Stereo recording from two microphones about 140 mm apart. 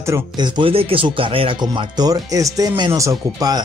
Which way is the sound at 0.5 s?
40° right (ahead or behind).